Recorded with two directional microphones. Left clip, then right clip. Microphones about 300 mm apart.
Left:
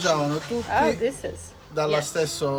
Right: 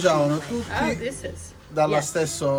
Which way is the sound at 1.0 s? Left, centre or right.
Left.